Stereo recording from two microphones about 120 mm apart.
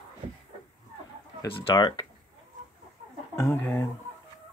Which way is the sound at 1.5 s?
45° left (ahead or behind).